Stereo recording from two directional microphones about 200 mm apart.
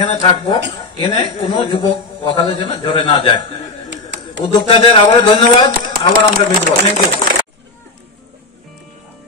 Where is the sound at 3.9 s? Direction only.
65° right (ahead or behind).